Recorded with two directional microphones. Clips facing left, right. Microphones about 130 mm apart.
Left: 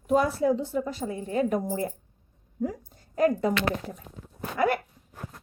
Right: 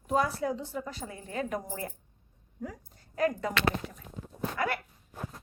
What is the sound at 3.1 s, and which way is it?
Speech, 30° left (ahead or behind).